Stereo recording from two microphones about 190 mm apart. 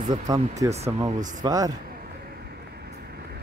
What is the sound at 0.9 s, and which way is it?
Speech, 20° right (ahead or behind).